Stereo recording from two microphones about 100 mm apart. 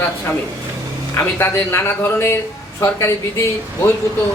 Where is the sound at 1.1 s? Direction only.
25° left (ahead or behind).